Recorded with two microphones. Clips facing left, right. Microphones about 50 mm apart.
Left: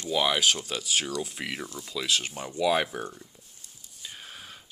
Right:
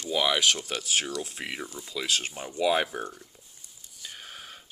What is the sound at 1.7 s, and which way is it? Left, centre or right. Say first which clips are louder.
Speech: left 1 dB; centre.